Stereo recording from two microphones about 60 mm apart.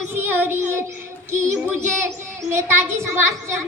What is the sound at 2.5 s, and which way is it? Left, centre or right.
A child's voice, right.